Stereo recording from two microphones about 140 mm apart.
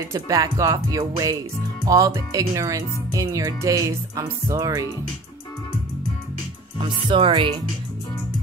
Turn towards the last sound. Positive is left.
turn(degrees=-35)  # may be behind; listen again after turning